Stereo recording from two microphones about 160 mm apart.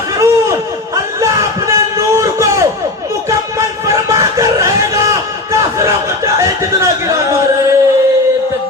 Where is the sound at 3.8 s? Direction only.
20° right (ahead or behind).